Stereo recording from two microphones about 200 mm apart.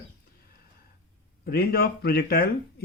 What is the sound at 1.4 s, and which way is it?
Speech, 50° left (ahead or behind).